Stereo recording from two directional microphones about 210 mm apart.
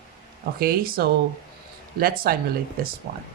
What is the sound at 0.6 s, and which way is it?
Speech, 45° right (ahead or behind).